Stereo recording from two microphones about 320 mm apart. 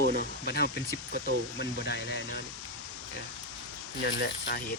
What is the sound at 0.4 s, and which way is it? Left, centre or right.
Speech, left.